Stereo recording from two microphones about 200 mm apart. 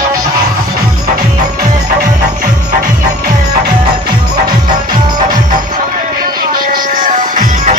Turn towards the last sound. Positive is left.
turn(degrees=-40)  # may be behind; listen again after turning